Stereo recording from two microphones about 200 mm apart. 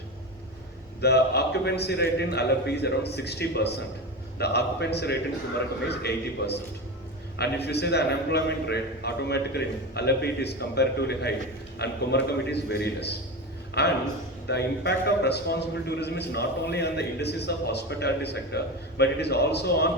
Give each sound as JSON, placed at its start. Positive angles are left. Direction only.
{"t": 1.0, "sound": "a man's voice", "side_deg": 55}